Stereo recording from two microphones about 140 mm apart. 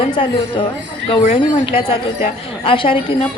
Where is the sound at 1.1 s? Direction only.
40° left (ahead or behind).